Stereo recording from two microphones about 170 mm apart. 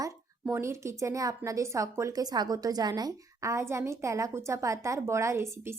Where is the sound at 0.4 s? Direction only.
15° right (ahead or behind).